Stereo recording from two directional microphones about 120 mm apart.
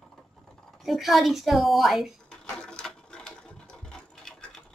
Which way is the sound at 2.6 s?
5° left (ahead or behind).